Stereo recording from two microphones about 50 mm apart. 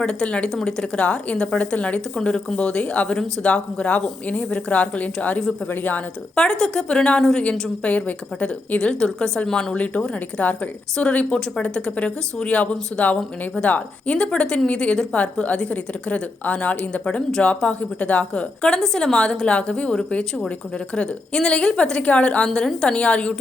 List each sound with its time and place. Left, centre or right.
0.0 s a woman's voice: centre; by 6.0 s left
6.3 s a woman's voice: centre
7.9 s a woman's voice: left
8.8 s a woman's voice: centre
9.7 s a woman's voice: left
22.4 s a woman's voice: centre